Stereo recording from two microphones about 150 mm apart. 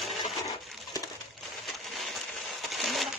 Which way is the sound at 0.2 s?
25° left (ahead or behind).